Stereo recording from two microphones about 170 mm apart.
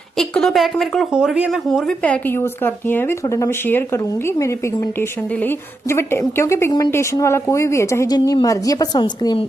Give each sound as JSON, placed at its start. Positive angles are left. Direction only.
{"t": 0.2, "sound": "a woman's voice", "side_deg": 0}